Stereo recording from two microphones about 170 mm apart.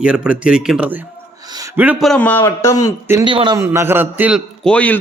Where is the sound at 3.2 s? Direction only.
30° right (ahead or behind).